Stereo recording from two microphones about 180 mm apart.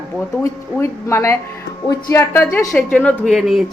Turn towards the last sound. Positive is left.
turn(degrees=0)  # may be behind; listen again after turning